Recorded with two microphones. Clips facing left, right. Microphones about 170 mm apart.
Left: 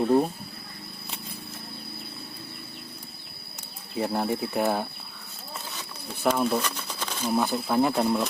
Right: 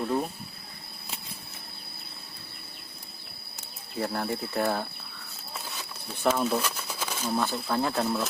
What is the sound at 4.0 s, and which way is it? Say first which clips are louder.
Speech: left 4 dB; 15° left (ahead or behind).